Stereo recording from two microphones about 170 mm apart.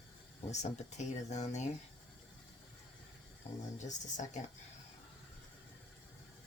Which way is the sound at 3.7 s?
45° left (ahead or behind).